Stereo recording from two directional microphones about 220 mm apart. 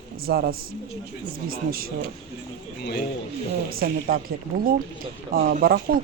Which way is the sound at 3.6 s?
40° right (ahead or behind).